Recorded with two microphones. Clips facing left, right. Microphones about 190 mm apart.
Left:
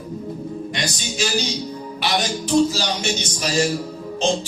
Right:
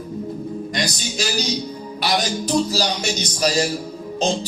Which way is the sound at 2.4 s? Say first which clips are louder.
Left 2 dB; 35° right (ahead or behind).